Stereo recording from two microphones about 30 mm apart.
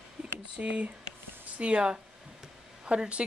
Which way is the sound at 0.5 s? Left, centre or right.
Right.